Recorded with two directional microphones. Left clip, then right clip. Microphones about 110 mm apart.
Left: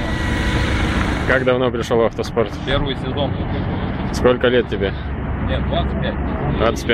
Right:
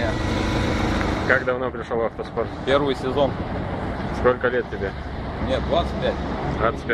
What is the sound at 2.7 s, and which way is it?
Speech, 35° right (ahead or behind).